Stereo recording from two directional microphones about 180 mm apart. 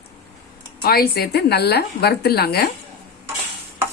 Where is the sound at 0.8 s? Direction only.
60° left (ahead or behind).